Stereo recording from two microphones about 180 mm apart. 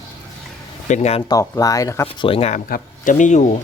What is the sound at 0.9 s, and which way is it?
Speech, 40° left (ahead or behind).